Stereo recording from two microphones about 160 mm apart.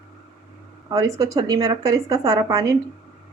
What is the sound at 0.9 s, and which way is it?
Speech, 20° right (ahead or behind).